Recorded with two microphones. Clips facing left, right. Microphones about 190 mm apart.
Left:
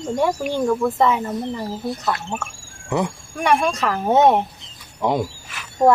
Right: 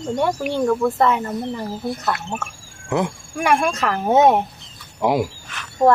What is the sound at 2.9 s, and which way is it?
Speech, 5° right (ahead or behind).